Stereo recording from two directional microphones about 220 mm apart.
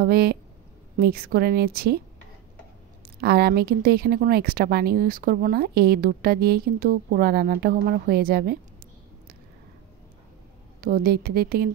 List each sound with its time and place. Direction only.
0.0 s speech: 45° right (ahead or behind)
3.2 s speech: 45° right (ahead or behind)
10.8 s speech: 40° right (ahead or behind)